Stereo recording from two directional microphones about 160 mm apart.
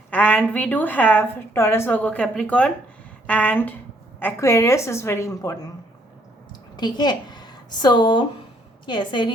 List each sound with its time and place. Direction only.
0.1 s a woman's voice: 10° left (ahead or behind); by 9.3 s 30° left (ahead or behind)